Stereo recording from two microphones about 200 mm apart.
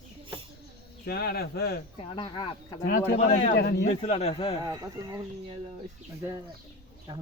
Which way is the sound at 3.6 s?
55° left (ahead or behind).